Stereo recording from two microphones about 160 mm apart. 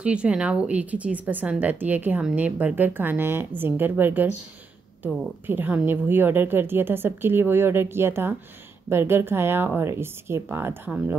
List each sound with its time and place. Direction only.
0.0 s speech: 5° right (ahead or behind)